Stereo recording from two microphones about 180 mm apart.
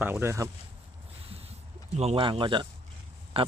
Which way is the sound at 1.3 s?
35° right (ahead or behind).